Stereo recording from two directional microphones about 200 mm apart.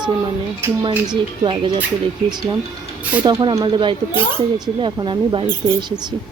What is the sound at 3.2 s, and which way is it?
Speech, 25° right (ahead or behind).